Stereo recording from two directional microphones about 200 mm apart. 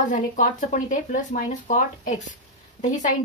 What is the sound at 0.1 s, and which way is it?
Speech, 40° left (ahead or behind).